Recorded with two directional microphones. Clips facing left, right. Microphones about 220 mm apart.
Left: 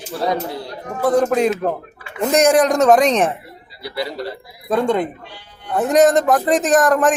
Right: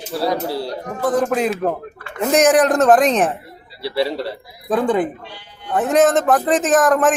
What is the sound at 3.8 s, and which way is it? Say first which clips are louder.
Speech: right 5 dB; 30° right (ahead or behind).